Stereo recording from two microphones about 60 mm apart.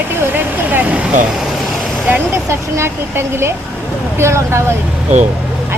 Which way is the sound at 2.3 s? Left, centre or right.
Right.